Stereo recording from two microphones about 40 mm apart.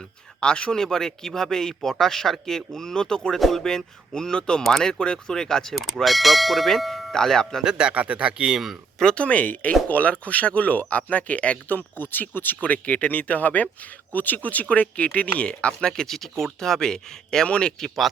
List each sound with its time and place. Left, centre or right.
0.3 s speech: left
3.3 s clang: centre
3.6 s speech: centre
5.7 s clang: centre
7.1 s speech: centre
7.6 s speech: right
7.9 s speech: right
9.1 s speech: left
11.7 s speech: left
12.6 s speech: left
15.9 s speech: centre
17.7 s clang: centre